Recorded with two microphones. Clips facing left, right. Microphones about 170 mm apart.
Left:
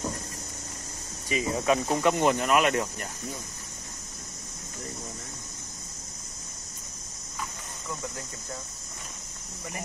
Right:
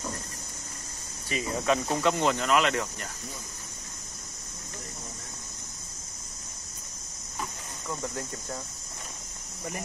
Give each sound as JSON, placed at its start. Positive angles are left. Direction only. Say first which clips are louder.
{"t": 1.3, "sound": "speech", "louder": "left 2 dB", "side_deg": 15}